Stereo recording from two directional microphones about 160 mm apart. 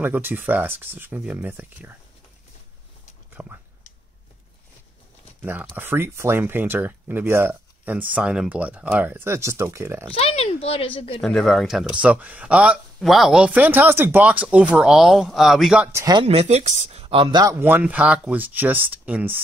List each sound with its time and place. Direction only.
0.0 s speech: 10° right (ahead or behind)
3.4 s dog: 5° right (ahead or behind)
5.4 s speech: 10° right (ahead or behind)
10.1 s speech: 40° left (ahead or behind)
11.1 s speech: centre (ahead or behind)
15.9 s speech: 20° right (ahead or behind)
16.2 s speech: 40° right (ahead or behind); by 19.4 s 10° right (ahead or behind)